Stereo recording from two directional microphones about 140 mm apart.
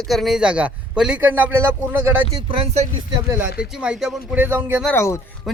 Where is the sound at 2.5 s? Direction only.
50° right (ahead or behind).